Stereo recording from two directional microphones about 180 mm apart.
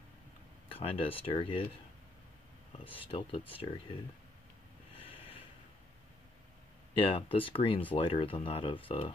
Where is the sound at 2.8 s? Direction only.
30° left (ahead or behind).